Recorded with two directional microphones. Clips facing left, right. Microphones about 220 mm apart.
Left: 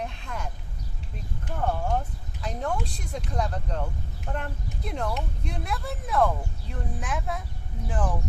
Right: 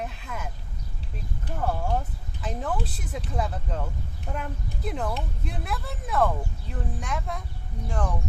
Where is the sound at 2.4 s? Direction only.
Centre (ahead or behind).